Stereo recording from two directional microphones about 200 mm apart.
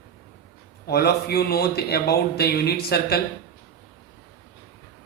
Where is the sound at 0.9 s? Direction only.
55° left (ahead or behind).